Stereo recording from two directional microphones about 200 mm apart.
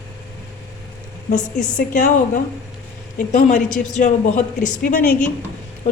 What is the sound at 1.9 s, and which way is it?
Speech, 40° left (ahead or behind).